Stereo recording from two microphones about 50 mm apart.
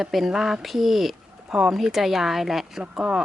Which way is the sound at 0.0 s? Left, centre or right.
Centre.